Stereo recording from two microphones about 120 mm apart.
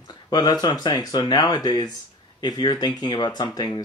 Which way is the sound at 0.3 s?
35° left (ahead or behind).